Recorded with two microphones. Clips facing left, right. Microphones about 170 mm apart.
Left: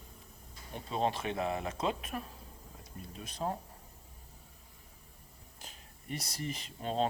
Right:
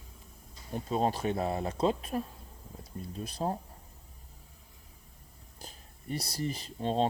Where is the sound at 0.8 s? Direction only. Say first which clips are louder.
Right 3 dB; 40° right (ahead or behind).